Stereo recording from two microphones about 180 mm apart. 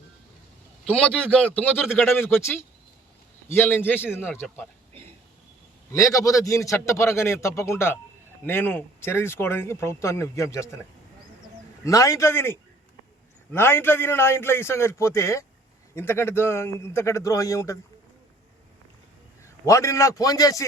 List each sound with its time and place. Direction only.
0.9 s speech: 5° left (ahead or behind)
5.9 s speech: 15° left (ahead or behind)
11.9 s speech: 20° left (ahead or behind)
19.6 s speech: 15° left (ahead or behind)